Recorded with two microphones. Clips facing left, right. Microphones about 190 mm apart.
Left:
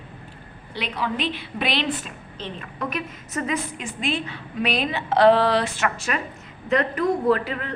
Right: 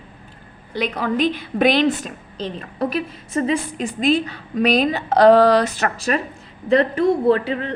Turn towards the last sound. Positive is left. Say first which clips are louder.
# right 4 dB
turn(degrees=-30)  # may be behind; listen again after turning